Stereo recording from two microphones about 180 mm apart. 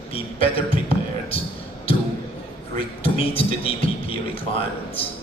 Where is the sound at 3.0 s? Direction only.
30° left (ahead or behind).